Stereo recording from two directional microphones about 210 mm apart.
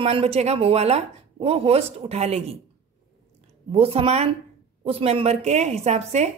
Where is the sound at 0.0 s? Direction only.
30° right (ahead or behind).